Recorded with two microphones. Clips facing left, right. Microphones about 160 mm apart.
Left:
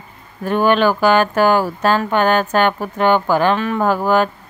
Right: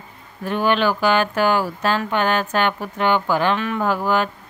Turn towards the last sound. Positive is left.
turn(degrees=45)  # may be behind; listen again after turning